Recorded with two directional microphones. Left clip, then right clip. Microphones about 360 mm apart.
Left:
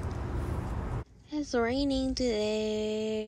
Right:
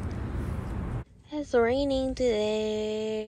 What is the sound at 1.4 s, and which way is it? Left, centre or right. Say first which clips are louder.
Speech: right 5 dB; centre.